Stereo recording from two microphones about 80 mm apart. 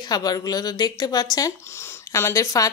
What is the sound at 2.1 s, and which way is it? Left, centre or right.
Speech, left.